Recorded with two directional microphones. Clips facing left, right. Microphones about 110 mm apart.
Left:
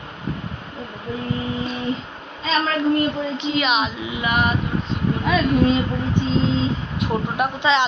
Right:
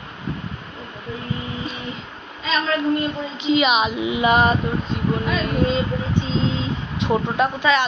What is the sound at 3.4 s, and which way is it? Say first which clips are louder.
Speech: right 5 dB; 5° right (ahead or behind).